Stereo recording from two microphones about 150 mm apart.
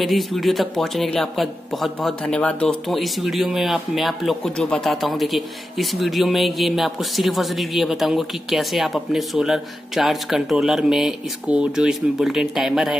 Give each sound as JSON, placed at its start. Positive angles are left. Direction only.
{"t": 0.0, "sound": "speech", "side_deg": 0}